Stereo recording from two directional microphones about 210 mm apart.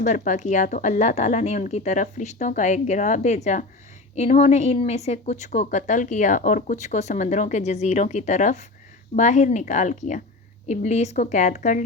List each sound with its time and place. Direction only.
0.0 s a woman's voice: 35° left (ahead or behind)